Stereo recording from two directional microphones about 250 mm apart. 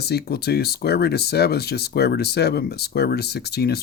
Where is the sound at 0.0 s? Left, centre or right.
Left.